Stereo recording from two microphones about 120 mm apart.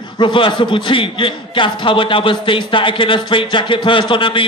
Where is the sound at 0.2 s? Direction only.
45° left (ahead or behind).